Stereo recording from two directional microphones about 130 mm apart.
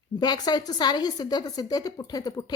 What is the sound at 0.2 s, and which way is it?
A woman's voice, 30° left (ahead or behind).